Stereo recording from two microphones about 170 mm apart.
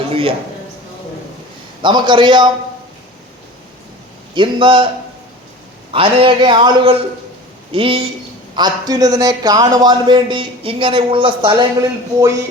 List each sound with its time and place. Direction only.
0.1 s a sound: 35° right (ahead or behind)
1.8 s a man's voice: 25° right (ahead or behind)
4.4 s a man's voice: 30° right (ahead or behind)
5.9 s a man's voice: 30° right (ahead or behind)